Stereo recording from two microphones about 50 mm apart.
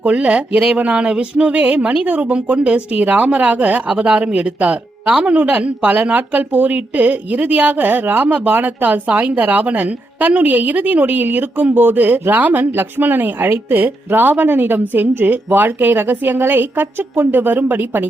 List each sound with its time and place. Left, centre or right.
0.0 s a woman's voice: right